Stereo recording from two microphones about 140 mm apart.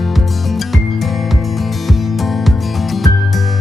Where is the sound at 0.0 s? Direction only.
Centre (ahead or behind).